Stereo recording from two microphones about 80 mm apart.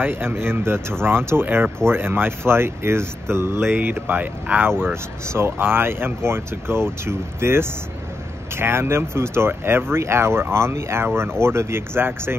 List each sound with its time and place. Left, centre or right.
0.0 s speech: right